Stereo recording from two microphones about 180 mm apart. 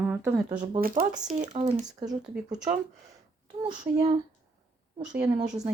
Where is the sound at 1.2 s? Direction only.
45° right (ahead or behind).